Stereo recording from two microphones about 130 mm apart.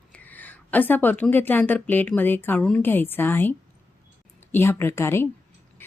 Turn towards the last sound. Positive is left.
turn(degrees=20)  # may be behind; listen again after turning